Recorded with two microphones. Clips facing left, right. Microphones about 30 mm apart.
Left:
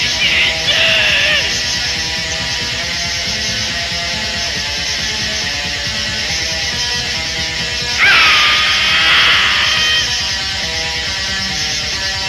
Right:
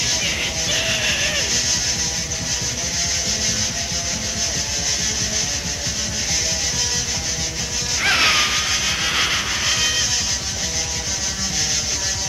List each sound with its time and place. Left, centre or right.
0.2 s music: left
8.0 s music: left
8.5 s vehicle: left
9.7 s music: left